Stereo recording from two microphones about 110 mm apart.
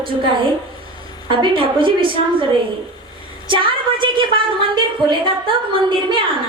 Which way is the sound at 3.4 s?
50° right (ahead or behind).